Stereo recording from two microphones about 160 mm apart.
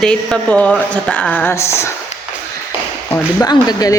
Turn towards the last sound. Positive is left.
turn(degrees=25)  # may be behind; listen again after turning